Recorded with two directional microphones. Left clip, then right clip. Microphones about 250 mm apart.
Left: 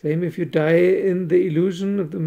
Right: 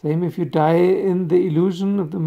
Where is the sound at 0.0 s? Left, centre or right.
Centre.